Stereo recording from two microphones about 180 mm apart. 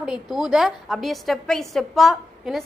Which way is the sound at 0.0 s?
Centre (ahead or behind).